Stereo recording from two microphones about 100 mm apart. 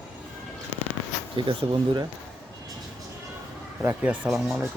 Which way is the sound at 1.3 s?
60° right (ahead or behind).